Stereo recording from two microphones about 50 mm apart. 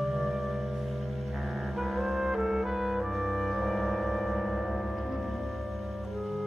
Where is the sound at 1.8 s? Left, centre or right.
Centre.